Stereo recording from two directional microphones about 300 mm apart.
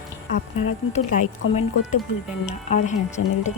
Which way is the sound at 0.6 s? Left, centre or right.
Left.